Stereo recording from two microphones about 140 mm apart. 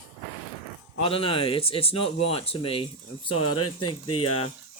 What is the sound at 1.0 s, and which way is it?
Speech, 40° left (ahead or behind).